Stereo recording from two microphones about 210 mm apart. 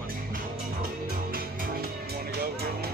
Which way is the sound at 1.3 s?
45° right (ahead or behind).